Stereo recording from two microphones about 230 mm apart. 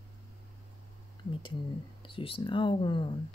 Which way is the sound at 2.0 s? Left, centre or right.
Left.